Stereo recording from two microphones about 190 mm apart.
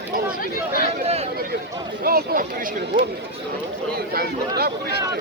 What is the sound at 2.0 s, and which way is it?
Speech, 50° right (ahead or behind).